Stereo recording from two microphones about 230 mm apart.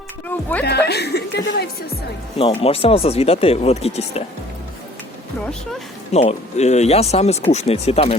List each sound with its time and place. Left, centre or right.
0.6 s speech: left
2.4 s speech: left
6.1 s speech: left